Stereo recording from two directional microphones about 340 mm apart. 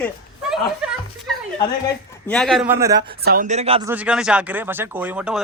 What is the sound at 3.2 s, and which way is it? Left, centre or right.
Speech, right.